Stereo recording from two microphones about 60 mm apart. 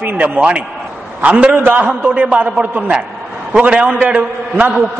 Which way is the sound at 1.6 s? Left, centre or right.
Right.